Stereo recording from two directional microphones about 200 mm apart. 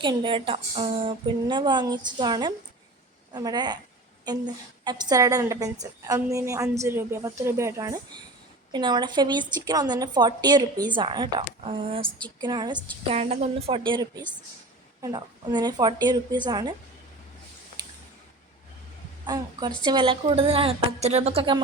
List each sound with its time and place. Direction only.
0.0 s a woman's voice: 25° right (ahead or behind)
13.1 s a woman's voice: 30° right (ahead or behind)
19.2 s a woman's voice: 20° right (ahead or behind)